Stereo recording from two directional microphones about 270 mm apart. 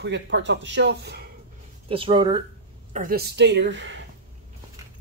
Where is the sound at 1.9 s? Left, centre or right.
Centre.